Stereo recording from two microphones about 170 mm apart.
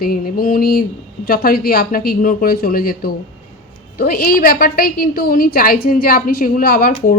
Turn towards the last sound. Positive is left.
turn(degrees=60)  # may be behind; listen again after turning